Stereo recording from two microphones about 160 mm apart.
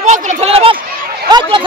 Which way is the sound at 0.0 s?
40° right (ahead or behind).